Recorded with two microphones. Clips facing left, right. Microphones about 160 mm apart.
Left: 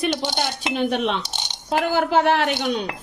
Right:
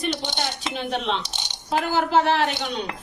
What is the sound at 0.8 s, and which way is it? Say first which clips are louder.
A woman's voice: left 4 dB; 55° left (ahead or behind).